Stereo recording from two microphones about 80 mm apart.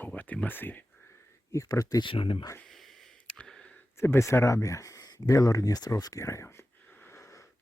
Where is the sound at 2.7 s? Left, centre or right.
Centre.